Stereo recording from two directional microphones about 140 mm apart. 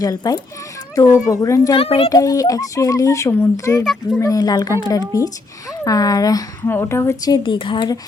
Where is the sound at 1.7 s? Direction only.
45° left (ahead or behind).